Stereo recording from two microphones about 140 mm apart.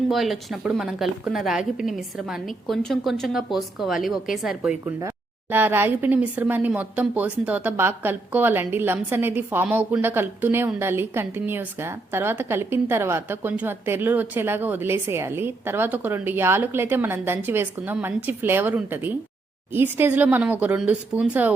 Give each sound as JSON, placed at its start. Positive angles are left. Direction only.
{"t": 0.1, "sound": "a woman's voice", "side_deg": 0}
{"t": 5.5, "sound": "a woman's voice", "side_deg": -15}